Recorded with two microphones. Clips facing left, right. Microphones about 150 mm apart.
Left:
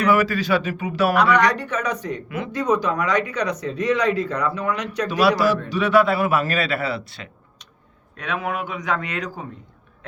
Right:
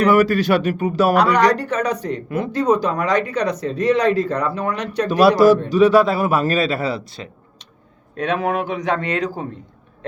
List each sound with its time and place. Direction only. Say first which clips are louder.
0.0 s speech: right 4 dB; 60° right (ahead or behind); by 5.0 s 30° right (ahead or behind)
5.6 s speech: right 5 dB; 40° right (ahead or behind)